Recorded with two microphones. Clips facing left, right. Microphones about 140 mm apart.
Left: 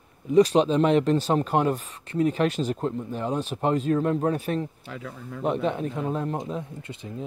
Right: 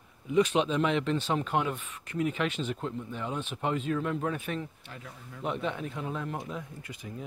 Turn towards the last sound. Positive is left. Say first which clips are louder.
# left 6 dB
turn(degrees=25)  # may be behind; listen again after turning